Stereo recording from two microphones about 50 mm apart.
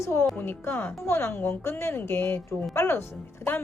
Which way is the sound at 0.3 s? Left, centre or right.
Left.